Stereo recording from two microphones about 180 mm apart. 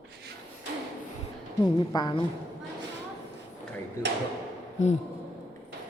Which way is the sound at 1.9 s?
20° left (ahead or behind).